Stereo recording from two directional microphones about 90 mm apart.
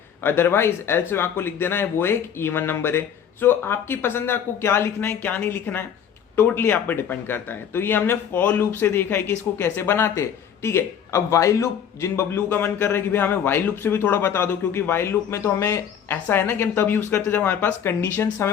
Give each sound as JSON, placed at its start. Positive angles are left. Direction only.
{"t": 0.2, "sound": "speech", "side_deg": 25}
{"t": 12.5, "sound": "speech", "side_deg": 25}